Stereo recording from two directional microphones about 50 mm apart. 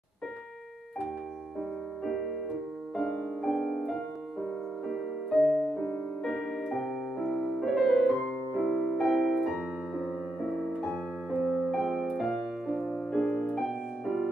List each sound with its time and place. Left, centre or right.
3.0 s music: centre
5.6 s music: left
6.2 s music: centre
13.1 s music: centre
13.6 s music: centre